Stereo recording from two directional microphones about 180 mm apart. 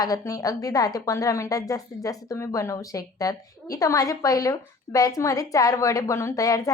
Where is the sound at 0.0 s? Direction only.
20° left (ahead or behind).